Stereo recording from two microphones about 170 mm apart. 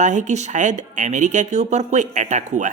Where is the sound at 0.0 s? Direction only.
45° right (ahead or behind).